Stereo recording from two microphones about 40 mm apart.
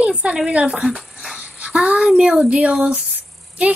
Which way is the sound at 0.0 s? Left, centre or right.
Right.